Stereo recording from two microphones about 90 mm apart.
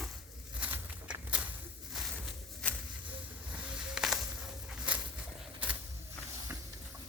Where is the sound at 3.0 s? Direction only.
15° right (ahead or behind).